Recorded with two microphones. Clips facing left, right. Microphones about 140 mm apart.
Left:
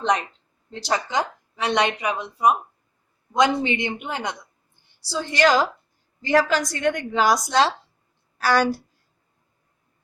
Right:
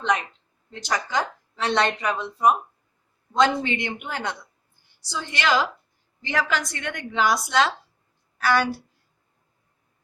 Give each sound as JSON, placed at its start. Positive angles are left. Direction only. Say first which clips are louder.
{"t": 0.7, "sound": "a woman's voice", "louder": "left 3 dB", "side_deg": 30}
{"t": 1.0, "sound": "a woman's voice", "louder": "left 1 dB", "side_deg": 15}
{"t": 5.0, "sound": "a woman's voice", "louder": "left 6 dB", "side_deg": 35}